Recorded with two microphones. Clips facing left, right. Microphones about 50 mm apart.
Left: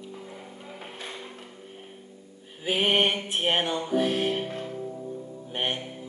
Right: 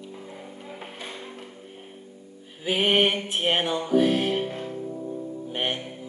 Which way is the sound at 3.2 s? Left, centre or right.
Centre.